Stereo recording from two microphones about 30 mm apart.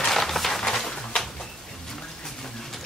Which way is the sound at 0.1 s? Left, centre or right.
Centre.